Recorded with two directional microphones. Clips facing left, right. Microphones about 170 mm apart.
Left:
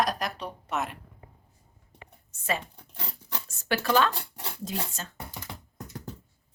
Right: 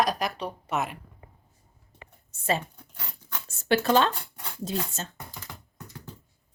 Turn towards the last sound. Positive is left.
turn(degrees=-25)  # may be behind; listen again after turning